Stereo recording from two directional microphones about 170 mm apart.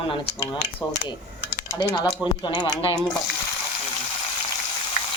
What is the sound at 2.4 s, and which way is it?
Speech, 30° left (ahead or behind).